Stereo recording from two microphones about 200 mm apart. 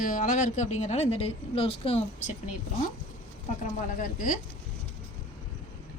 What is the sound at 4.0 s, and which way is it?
Speech, 40° left (ahead or behind).